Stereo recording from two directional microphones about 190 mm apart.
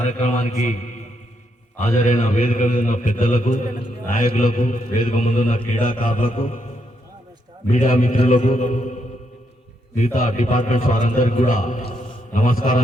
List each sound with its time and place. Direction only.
0.0 s a man's voice: 40° left (ahead or behind)
7.7 s a man's voice: 45° left (ahead or behind)
10.0 s a man's voice: 40° left (ahead or behind)